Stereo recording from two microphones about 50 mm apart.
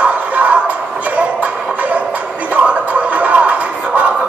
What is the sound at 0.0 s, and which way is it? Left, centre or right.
Music, right.